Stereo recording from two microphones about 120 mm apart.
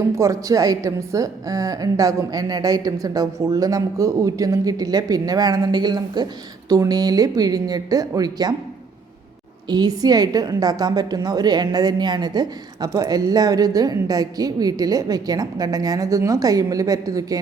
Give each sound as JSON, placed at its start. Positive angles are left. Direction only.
{"t": 0.2, "sound": "a woman's voice", "side_deg": -25}
{"t": 9.6, "sound": "a woman's voice", "side_deg": -35}